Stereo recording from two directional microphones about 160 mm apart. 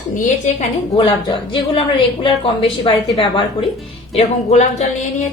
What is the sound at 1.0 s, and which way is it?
A woman's voice, 30° left (ahead or behind).